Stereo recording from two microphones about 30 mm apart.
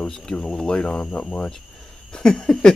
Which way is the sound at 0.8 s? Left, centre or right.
Left.